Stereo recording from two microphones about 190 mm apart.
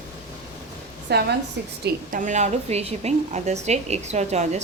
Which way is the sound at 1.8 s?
45° right (ahead or behind).